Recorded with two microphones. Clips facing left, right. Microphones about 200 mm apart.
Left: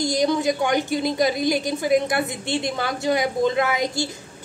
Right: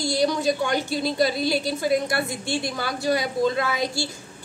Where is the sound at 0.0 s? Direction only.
20° left (ahead or behind).